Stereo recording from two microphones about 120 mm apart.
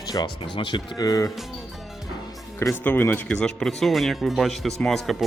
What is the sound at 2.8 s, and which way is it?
Speech, 15° left (ahead or behind).